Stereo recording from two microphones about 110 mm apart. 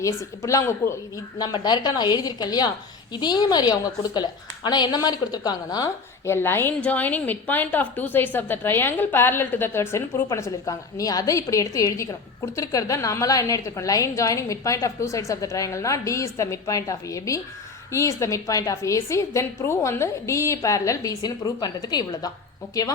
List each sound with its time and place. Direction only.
0.0 s a woman's voice: 30° left (ahead or behind)
1.4 s a woman's voice: 40° left (ahead or behind)
6.2 s a woman's voice: 20° left (ahead or behind); by 22.3 s 40° left (ahead or behind)